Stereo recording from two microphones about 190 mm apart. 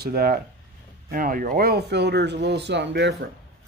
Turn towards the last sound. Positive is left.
turn(degrees=-65)  # may be behind; listen again after turning